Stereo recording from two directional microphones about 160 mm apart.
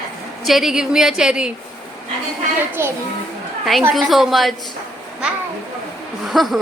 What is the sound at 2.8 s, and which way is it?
Speech, 15° right (ahead or behind).